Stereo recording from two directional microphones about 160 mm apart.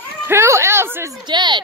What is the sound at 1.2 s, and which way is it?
Speech, 30° right (ahead or behind).